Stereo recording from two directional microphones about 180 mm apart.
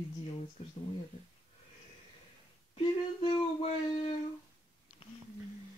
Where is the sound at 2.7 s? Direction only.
25° left (ahead or behind).